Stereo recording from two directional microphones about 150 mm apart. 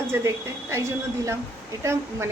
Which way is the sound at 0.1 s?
20° right (ahead or behind).